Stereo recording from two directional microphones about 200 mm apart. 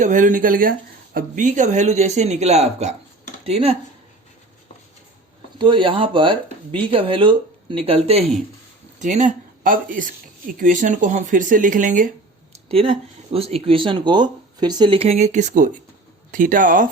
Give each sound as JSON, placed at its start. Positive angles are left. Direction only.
{"t": 0.0, "sound": "speech", "side_deg": -40}
{"t": 5.5, "sound": "speech", "side_deg": -25}
{"t": 12.5, "sound": "speech", "side_deg": -30}